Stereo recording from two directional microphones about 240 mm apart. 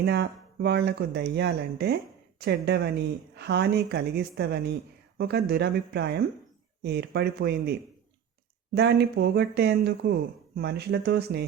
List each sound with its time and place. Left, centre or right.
0.0 s speech: right